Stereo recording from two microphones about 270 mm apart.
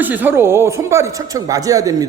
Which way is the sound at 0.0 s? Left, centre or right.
Centre.